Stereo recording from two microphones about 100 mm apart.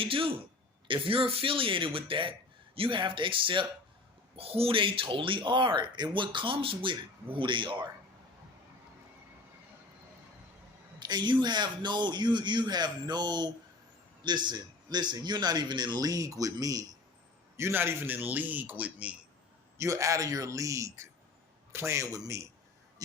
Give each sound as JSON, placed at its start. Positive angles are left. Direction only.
{"t": 0.0, "sound": "speech", "side_deg": -65}
{"t": 4.4, "sound": "speech", "side_deg": -75}
{"t": 11.0, "sound": "a man's voice", "side_deg": -45}
{"t": 17.6, "sound": "a man's voice", "side_deg": -25}
{"t": 19.8, "sound": "a man's voice", "side_deg": -35}
{"t": 23.0, "sound": "a sound", "side_deg": -35}